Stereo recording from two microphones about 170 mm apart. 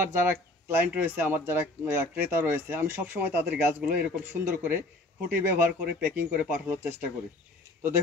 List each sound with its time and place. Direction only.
0.1 s speech: 10° right (ahead or behind)